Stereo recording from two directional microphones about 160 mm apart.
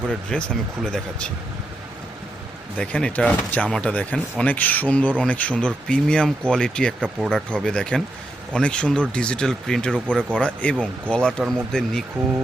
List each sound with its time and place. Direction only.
0.3 s speech: 5° left (ahead or behind)
2.7 s speech: 5° left (ahead or behind)